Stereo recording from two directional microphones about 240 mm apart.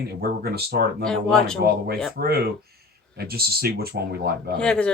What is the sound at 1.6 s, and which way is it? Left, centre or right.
Speech, right.